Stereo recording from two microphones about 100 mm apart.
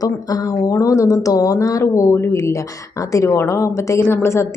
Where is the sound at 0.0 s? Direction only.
40° left (ahead or behind).